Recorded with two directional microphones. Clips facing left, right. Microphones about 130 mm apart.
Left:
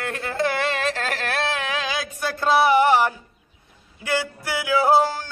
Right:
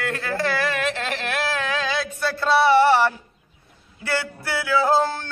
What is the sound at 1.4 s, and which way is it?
Music, 20° left (ahead or behind).